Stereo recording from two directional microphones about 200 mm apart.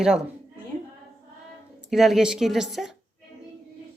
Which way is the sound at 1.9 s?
Centre (ahead or behind).